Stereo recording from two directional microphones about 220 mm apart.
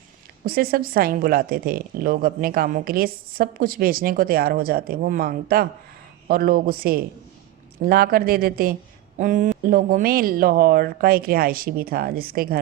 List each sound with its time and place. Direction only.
0.4 s a woman's voice: 45° right (ahead or behind)